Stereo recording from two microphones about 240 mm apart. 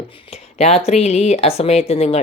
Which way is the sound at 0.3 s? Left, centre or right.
Left.